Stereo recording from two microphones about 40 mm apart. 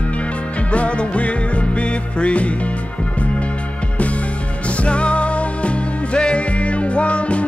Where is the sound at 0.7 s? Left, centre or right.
Left.